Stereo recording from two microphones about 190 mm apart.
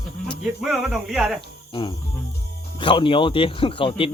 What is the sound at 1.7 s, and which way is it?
Cricket, 25° left (ahead or behind).